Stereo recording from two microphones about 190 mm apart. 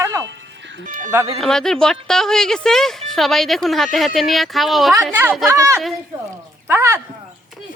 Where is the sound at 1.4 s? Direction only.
Centre (ahead or behind).